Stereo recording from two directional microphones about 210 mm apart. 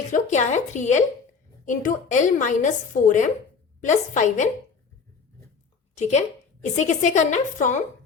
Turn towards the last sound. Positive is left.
turn(degrees=35)  # may be behind; listen again after turning